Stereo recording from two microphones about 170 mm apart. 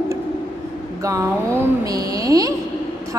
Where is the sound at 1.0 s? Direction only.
20° right (ahead or behind).